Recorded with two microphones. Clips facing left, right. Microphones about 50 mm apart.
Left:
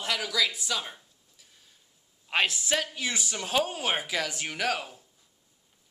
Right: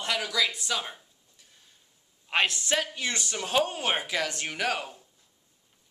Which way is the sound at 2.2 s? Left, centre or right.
Centre.